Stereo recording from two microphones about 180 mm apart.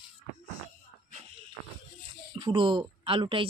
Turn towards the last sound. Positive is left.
turn(degrees=-30)  # may be behind; listen again after turning